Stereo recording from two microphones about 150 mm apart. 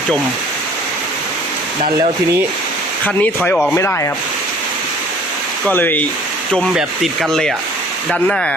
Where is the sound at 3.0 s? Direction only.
10° left (ahead or behind).